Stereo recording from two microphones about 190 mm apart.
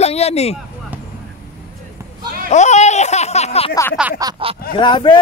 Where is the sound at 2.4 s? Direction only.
40° left (ahead or behind).